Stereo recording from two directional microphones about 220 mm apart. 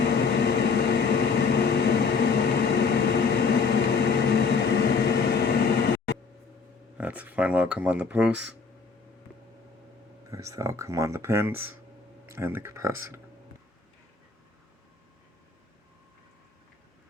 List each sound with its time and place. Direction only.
0.0 s vehicle: 50° left (ahead or behind)
6.9 s speech: 5° right (ahead or behind)
10.2 s speech: 15° right (ahead or behind)